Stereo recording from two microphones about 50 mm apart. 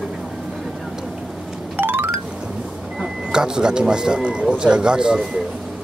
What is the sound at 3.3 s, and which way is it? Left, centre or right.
Speech, centre.